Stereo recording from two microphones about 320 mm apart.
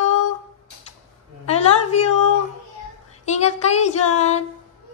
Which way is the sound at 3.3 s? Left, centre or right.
Left.